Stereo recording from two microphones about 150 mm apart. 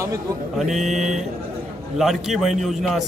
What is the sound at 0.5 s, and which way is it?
Speech, centre (ahead or behind).